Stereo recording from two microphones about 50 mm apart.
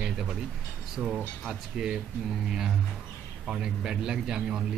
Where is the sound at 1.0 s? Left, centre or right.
Right.